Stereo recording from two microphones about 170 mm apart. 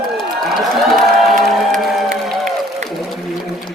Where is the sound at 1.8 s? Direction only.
Centre (ahead or behind).